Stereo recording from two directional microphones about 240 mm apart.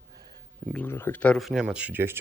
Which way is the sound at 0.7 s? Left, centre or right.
Centre.